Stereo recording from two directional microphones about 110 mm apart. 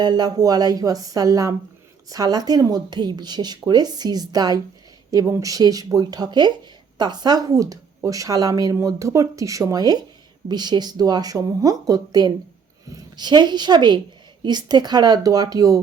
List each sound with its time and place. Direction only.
0.0 s speech: 40° right (ahead or behind)